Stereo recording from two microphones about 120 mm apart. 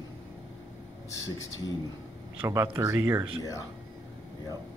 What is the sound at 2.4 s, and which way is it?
Speech, 20° right (ahead or behind).